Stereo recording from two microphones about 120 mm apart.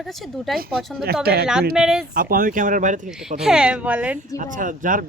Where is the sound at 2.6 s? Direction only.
90° right.